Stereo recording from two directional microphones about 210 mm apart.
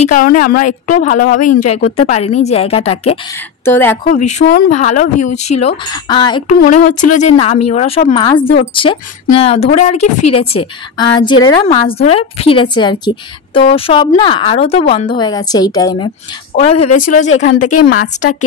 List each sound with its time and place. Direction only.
0.1 s a woman's voice: 40° left (ahead or behind)
3.6 s a woman's voice: 10° left (ahead or behind)
4.0 s a woman's voice: 35° left (ahead or behind)
6.6 s a woman's voice: 40° left (ahead or behind); by 16.1 s 20° left (ahead or behind)
16.5 s a woman's voice: 30° left (ahead or behind)
17.5 s speech: 90° left